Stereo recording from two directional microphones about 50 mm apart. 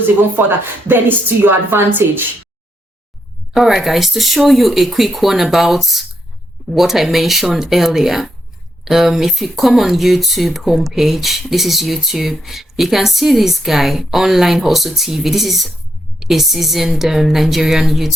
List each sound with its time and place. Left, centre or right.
0.0 s speech: right
3.5 s speech: centre